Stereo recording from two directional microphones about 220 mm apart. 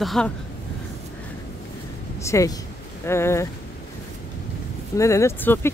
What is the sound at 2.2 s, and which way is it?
Speech, 15° left (ahead or behind).